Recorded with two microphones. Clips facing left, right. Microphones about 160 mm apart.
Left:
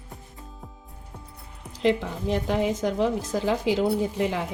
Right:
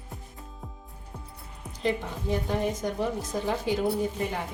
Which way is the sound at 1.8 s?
90° left.